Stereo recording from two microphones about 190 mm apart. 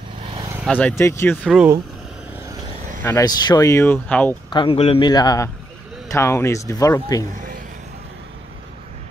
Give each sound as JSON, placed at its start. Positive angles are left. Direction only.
{"t": 0.4, "sound": "vehicle", "side_deg": -15}
{"t": 0.7, "sound": "speech", "side_deg": 10}
{"t": 3.0, "sound": "speech", "side_deg": 15}
{"t": 4.5, "sound": "speech", "side_deg": 25}
{"t": 7.3, "sound": "a sound", "side_deg": -45}